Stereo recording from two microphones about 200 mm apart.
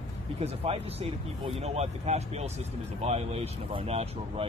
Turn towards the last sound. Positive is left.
turn(degrees=-30)  # may be behind; listen again after turning